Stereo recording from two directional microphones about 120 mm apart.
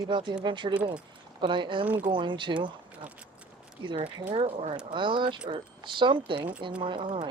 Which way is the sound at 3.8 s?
40° right (ahead or behind).